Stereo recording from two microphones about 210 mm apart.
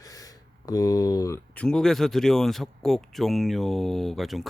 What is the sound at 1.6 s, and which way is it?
Speech, 5° left (ahead or behind).